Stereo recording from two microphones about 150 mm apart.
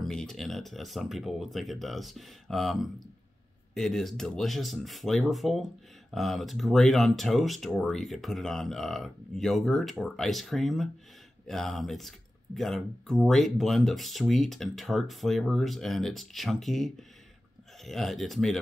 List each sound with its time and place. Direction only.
0.0 s speech: 5° left (ahead or behind)